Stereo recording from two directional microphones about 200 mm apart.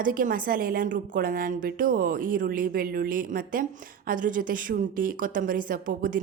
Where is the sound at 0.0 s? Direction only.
45° right (ahead or behind).